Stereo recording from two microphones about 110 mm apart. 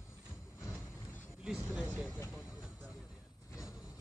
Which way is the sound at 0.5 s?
20° left (ahead or behind).